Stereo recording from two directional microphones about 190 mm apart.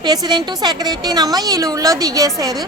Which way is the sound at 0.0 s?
20° right (ahead or behind).